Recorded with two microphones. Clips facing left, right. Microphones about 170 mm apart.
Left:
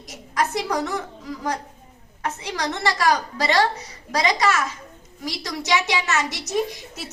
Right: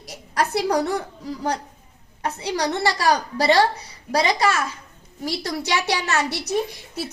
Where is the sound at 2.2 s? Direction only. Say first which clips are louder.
Right 3 dB; 35° right (ahead or behind).